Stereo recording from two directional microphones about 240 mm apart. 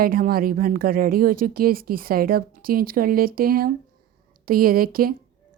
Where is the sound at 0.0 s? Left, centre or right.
Right.